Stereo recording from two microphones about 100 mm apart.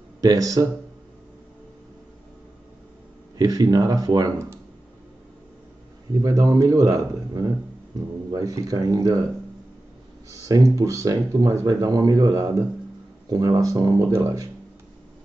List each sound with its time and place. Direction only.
0.2 s speech: 35° right (ahead or behind)
3.3 s speech: 40° right (ahead or behind)
6.2 s speech: 35° right (ahead or behind)
10.3 s speech: 35° right (ahead or behind)